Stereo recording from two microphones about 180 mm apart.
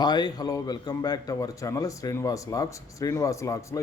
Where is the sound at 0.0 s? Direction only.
25° left (ahead or behind).